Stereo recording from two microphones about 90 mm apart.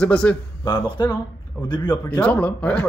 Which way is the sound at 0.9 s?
55° left (ahead or behind).